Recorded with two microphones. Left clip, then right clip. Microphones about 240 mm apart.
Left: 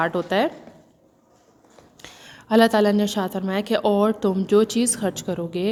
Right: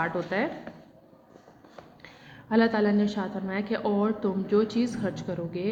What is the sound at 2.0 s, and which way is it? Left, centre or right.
A woman's voice, left.